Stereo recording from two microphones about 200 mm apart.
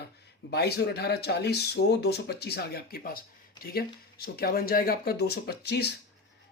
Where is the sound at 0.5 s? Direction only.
55° left (ahead or behind).